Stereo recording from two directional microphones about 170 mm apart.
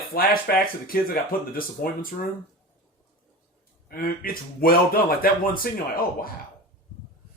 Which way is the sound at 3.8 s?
60° left (ahead or behind).